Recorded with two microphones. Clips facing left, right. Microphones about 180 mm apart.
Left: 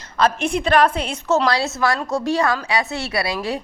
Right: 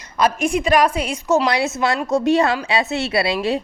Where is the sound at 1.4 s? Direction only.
20° right (ahead or behind).